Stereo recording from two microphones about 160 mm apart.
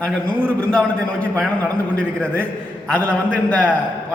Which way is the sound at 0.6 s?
10° left (ahead or behind).